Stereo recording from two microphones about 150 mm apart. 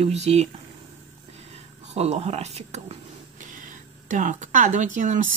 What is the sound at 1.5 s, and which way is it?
Speech, 45° right (ahead or behind).